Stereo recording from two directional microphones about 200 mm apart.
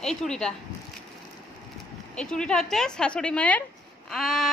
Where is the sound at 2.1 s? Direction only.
5° left (ahead or behind).